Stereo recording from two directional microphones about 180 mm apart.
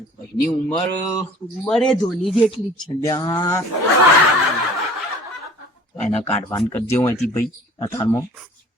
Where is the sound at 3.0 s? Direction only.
20° left (ahead or behind).